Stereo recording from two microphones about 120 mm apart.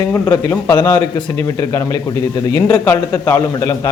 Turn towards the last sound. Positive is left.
turn(degrees=30)  # may be behind; listen again after turning